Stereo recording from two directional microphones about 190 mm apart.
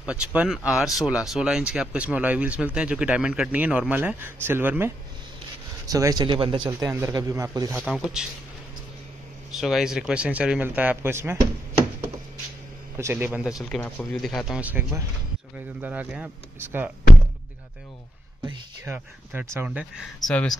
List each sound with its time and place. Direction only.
0.0 s a man's voice: 5° right (ahead or behind)
7.7 s speech: centre (ahead or behind)
9.5 s speech: centre (ahead or behind)
12.9 s speech: 10° right (ahead or behind)
13.7 s speech: 10° left (ahead or behind); by 16.9 s 10° right (ahead or behind)
18.9 s speech: 10° right (ahead or behind)